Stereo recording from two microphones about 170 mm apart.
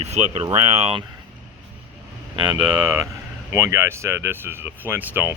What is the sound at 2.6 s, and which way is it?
Speech, 25° right (ahead or behind).